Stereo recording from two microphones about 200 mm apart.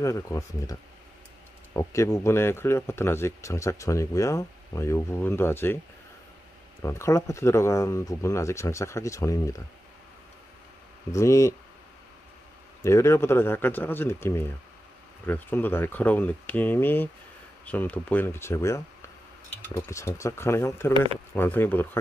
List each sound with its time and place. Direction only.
0.0 s speech: 15° left (ahead or behind)
6.8 s speech: 15° left (ahead or behind)
11.1 s speech: 15° left (ahead or behind)
12.8 s speech: 15° left (ahead or behind)